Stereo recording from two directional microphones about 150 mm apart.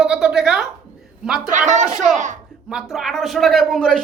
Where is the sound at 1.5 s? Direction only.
55° right (ahead or behind).